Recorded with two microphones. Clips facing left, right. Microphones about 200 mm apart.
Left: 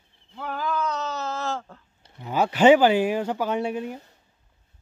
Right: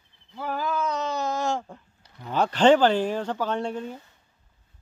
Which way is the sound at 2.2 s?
10° left (ahead or behind).